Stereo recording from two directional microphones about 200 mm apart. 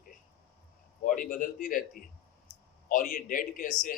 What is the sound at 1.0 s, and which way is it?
A man's voice, 40° left (ahead or behind).